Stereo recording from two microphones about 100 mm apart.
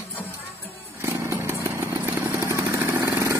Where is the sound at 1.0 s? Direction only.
25° right (ahead or behind).